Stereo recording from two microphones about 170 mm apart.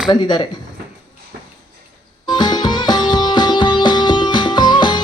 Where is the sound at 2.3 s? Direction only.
25° left (ahead or behind).